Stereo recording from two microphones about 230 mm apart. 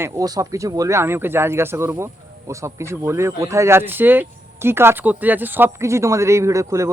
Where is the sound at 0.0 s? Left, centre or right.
Centre.